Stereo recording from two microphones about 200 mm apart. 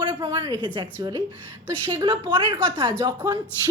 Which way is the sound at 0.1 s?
15° right (ahead or behind).